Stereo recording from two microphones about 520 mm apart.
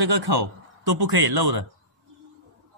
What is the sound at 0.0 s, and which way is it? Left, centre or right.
A man's voice, right.